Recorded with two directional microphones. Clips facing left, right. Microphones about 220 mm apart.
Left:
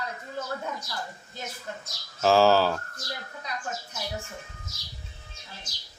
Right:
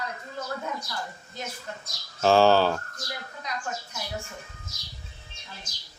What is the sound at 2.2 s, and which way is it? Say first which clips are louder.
Speech: right 1 dB; centre (ahead or behind).